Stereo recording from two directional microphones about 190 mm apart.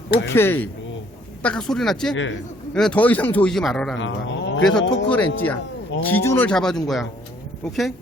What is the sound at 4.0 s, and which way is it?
Speech, 75° left (ahead or behind).